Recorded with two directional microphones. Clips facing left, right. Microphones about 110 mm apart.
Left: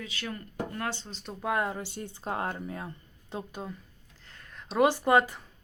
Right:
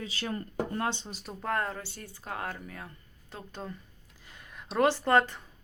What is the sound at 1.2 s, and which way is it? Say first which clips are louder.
Speech: left 2 dB; 5° left (ahead or behind).